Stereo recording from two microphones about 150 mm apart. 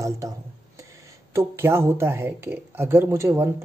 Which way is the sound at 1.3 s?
15° right (ahead or behind).